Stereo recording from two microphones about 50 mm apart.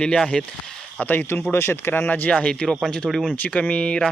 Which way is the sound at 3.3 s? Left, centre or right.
Left.